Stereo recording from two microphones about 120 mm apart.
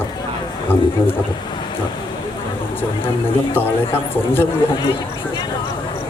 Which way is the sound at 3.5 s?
20° left (ahead or behind).